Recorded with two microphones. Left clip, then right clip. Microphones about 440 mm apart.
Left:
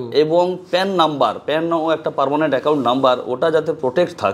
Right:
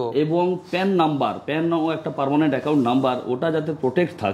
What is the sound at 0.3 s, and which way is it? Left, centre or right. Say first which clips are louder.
A man's voice: left 6 dB; left.